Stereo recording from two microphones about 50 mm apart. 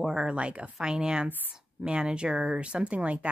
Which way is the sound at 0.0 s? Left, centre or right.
Centre.